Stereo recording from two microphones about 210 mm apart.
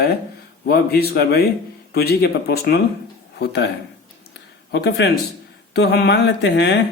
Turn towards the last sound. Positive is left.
turn(degrees=50)  # may be behind; listen again after turning